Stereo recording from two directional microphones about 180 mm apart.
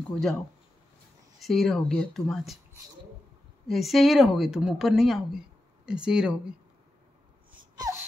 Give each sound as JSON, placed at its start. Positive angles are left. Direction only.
{"t": 0.1, "sound": "a woman's voice", "side_deg": 5}
{"t": 1.4, "sound": "a woman's voice", "side_deg": 0}
{"t": 3.6, "sound": "a woman's voice", "side_deg": 0}
{"t": 7.7, "sound": "a sound", "side_deg": -20}